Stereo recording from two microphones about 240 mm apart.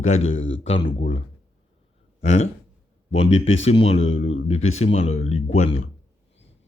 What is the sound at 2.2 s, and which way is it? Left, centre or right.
Speech, left.